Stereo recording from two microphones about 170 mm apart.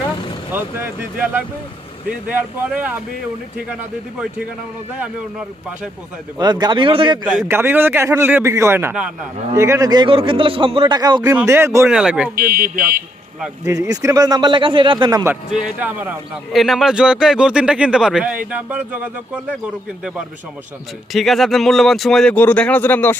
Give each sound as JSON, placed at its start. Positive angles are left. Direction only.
{"t": 0.5, "sound": "a man's voice", "side_deg": -10}
{"t": 4.9, "sound": "a man's voice", "side_deg": -5}
{"t": 6.4, "sound": "a man's voice", "side_deg": -25}
{"t": 7.4, "sound": "a man's voice", "side_deg": -15}
{"t": 11.2, "sound": "a man's voice", "side_deg": -15}
{"t": 11.9, "sound": "a man's voice", "side_deg": -5}
{"t": 12.4, "sound": "speech", "side_deg": -60}
{"t": 13.7, "sound": "a man's voice", "side_deg": -20}
{"t": 15.4, "sound": "a man's voice", "side_deg": -5}
{"t": 21.1, "sound": "a man's voice", "side_deg": 0}